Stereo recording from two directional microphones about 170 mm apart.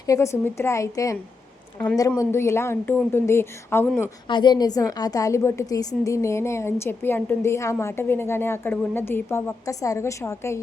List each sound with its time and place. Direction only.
0.0 s a woman's voice: 20° left (ahead or behind)
4.3 s a woman's voice: 25° left (ahead or behind)